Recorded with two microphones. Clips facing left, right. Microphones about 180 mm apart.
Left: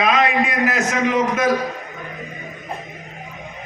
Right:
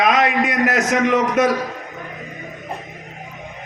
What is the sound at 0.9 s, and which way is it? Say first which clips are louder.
Speech: right 2 dB; 60° right (ahead or behind).